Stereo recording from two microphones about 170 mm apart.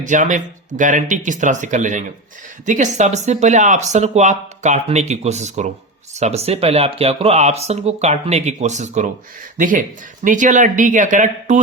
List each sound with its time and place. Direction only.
0.0 s speech: 45° right (ahead or behind)